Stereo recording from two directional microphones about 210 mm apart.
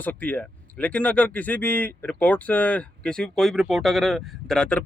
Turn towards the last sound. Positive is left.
turn(degrees=5)  # may be behind; listen again after turning